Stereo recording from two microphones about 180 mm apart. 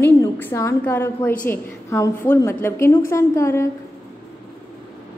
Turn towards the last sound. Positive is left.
turn(degrees=15)  # may be behind; listen again after turning